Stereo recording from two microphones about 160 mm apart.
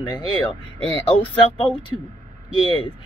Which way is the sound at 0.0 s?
30° left (ahead or behind).